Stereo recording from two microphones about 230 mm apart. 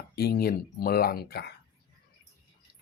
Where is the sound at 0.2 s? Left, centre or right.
Left.